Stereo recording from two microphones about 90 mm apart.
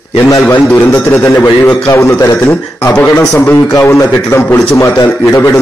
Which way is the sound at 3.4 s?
20° left (ahead or behind).